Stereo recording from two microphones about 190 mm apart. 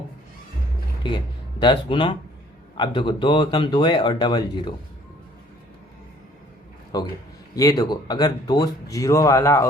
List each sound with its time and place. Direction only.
1.0 s speech: 25° left (ahead or behind)
6.9 s speech: 20° left (ahead or behind)